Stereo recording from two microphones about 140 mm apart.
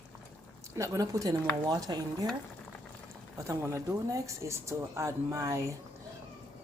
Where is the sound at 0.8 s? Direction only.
25° right (ahead or behind).